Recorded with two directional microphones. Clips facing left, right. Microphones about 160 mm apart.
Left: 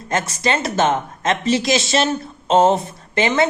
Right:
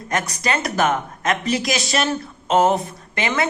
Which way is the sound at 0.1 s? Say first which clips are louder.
Left 3 dB; 25° left (ahead or behind).